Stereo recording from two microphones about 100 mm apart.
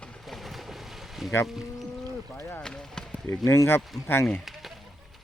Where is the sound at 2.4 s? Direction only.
20° left (ahead or behind).